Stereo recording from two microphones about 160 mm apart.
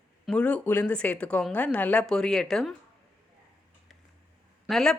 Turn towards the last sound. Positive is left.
turn(degrees=0)  # may be behind; listen again after turning